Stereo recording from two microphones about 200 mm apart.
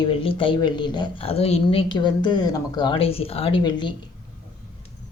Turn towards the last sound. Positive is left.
turn(degrees=20)  # may be behind; listen again after turning